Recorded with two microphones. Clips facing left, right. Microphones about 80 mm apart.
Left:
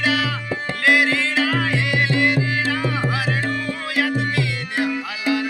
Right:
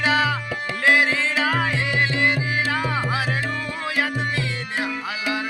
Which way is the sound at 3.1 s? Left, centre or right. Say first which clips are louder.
Left 2 dB; right.